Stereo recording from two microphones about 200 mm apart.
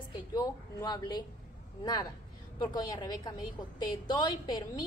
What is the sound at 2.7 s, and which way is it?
A woman's voice, 20° left (ahead or behind).